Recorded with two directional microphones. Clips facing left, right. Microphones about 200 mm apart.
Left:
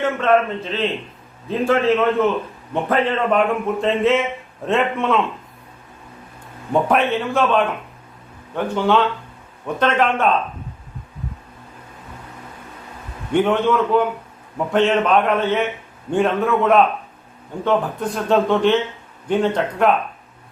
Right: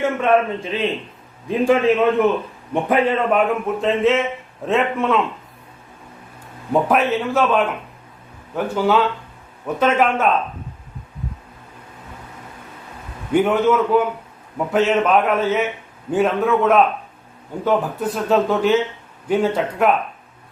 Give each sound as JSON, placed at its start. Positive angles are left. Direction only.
{"t": 0.0, "sound": "a man's voice", "side_deg": -10}
{"t": 6.7, "sound": "a man's voice", "side_deg": 0}
{"t": 13.3, "sound": "a man's voice", "side_deg": -5}